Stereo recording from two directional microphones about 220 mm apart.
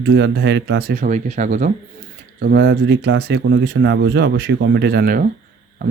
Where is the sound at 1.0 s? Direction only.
35° right (ahead or behind).